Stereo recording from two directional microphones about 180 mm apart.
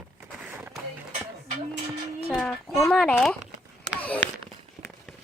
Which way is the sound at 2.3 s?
5° left (ahead or behind).